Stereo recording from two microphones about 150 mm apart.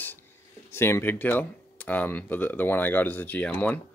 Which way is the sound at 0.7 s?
15° left (ahead or behind).